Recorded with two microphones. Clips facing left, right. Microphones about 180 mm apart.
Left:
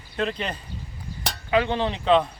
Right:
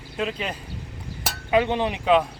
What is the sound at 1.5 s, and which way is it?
Speech, 15° right (ahead or behind).